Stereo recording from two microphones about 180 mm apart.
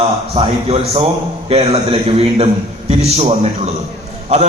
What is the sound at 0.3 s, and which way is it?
A man's voice, 35° right (ahead or behind).